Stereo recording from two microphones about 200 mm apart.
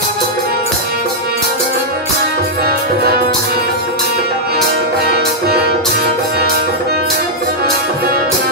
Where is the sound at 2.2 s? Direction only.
50° right (ahead or behind).